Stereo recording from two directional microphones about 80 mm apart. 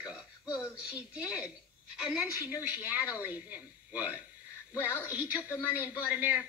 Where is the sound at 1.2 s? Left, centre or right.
Centre.